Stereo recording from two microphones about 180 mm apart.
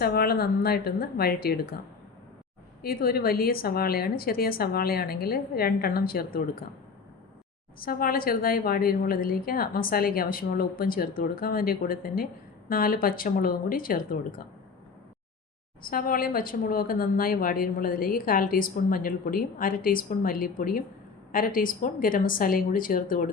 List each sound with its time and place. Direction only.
0.0 s a woman's voice: 60° left (ahead or behind)
2.8 s a woman's voice: 55° left (ahead or behind)
7.8 s speech: 55° left (ahead or behind)
15.8 s speech: 50° left (ahead or behind)